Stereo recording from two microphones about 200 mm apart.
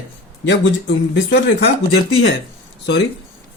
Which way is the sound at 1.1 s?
55° left (ahead or behind).